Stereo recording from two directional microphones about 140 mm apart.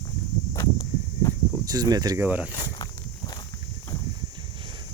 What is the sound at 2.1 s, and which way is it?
Speech, 15° right (ahead or behind).